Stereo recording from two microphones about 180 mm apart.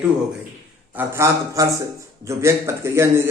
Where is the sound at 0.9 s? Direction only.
15° right (ahead or behind).